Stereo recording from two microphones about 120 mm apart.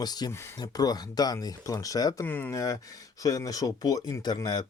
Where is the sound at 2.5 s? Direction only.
30° left (ahead or behind).